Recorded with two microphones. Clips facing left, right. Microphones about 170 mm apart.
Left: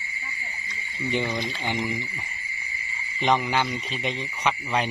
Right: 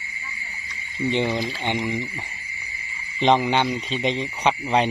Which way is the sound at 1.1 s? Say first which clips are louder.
Right 2 dB; 20° right (ahead or behind).